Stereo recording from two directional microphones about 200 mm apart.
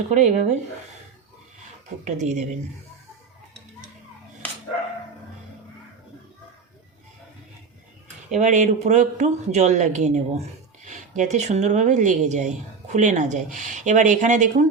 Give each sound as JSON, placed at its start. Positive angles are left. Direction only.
{"t": 0.1, "sound": "speech", "side_deg": -35}
{"t": 2.0, "sound": "speech", "side_deg": -35}
{"t": 8.4, "sound": "speech", "side_deg": -35}